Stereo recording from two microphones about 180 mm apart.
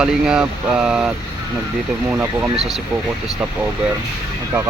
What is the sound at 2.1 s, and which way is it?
Speech, 10° right (ahead or behind).